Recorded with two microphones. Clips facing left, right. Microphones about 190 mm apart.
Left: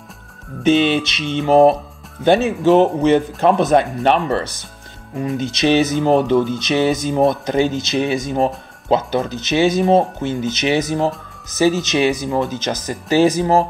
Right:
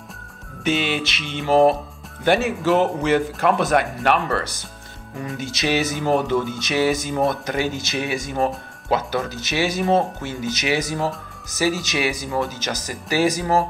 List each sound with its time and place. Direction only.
0.7 s speech: 20° left (ahead or behind)